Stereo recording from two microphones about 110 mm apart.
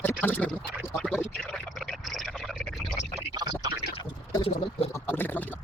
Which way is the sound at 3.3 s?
40° right (ahead or behind).